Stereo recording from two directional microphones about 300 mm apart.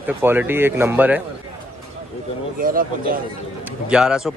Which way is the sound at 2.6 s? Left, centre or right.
Right.